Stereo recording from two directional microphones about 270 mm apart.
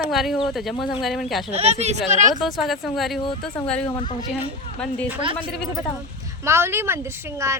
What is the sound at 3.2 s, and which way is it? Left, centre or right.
Speech, centre.